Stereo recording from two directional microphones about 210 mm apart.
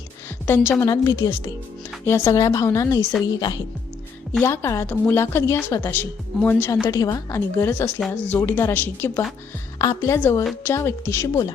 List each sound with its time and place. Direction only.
0.4 s a woman's voice: 10° left (ahead or behind)
4.3 s a woman's voice: 10° left (ahead or behind)
6.8 s a woman's voice: 20° left (ahead or behind)